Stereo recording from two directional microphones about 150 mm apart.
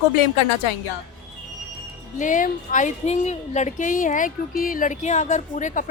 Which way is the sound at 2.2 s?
60° left (ahead or behind).